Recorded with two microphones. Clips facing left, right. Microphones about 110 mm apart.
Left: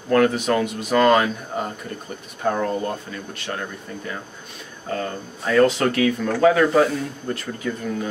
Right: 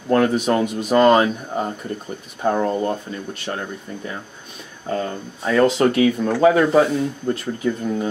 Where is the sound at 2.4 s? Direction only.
20° right (ahead or behind).